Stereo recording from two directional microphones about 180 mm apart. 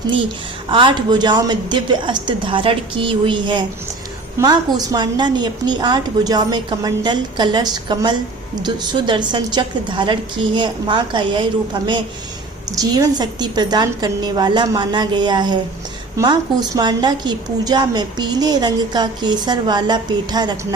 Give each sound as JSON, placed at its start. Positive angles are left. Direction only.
{"t": 0.7, "sound": "a woman's voice", "side_deg": -25}